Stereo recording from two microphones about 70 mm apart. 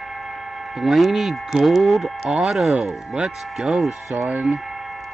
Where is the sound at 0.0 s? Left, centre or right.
Centre.